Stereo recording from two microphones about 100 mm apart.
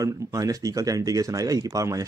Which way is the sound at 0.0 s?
35° right (ahead or behind).